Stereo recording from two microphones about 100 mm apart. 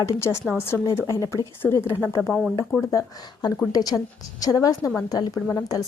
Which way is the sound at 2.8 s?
35° left (ahead or behind).